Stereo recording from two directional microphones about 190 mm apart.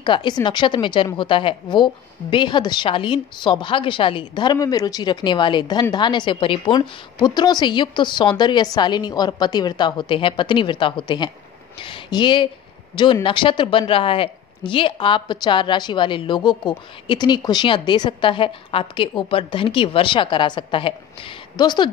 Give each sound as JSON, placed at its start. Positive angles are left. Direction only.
{"t": 0.0, "sound": "speech", "side_deg": 25}